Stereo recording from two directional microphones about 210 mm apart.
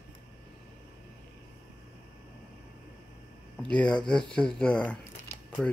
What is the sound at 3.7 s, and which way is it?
Speech, 5° left (ahead or behind).